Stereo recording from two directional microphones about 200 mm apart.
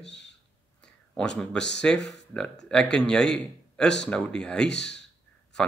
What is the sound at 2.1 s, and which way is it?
A man's voice, 5° left (ahead or behind).